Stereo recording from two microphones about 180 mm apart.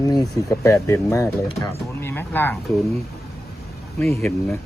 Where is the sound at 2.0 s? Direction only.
10° left (ahead or behind).